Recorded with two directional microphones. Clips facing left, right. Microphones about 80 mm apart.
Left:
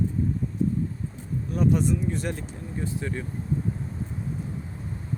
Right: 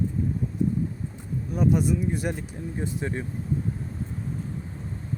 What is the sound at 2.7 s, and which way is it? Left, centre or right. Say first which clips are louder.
Speech: even; right.